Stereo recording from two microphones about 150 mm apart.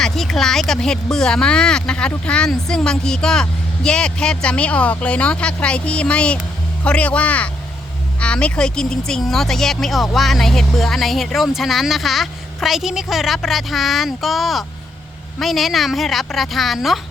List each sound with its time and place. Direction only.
0.0 s speech: 5° left (ahead or behind)